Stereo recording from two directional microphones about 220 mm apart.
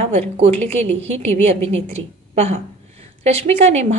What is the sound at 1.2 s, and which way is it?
A woman's voice, 30° right (ahead or behind).